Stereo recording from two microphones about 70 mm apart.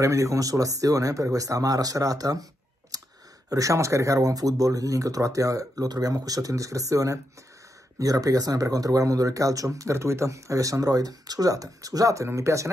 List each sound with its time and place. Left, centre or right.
0.0 s speech: right
2.9 s clicking: right
3.4 s speech: right